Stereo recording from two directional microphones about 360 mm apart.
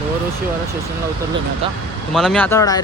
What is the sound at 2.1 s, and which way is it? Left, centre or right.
Speech, centre.